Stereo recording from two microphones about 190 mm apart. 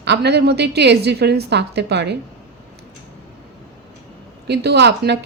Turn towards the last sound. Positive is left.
turn(degrees=-60)  # may be behind; listen again after turning